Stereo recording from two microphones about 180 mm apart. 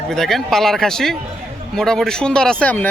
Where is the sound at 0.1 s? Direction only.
Centre (ahead or behind).